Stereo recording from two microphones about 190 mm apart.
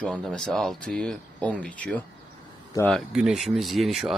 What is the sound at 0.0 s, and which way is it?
Speech, 5° left (ahead or behind).